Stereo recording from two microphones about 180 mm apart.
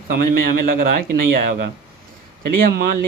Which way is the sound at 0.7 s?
55° right (ahead or behind).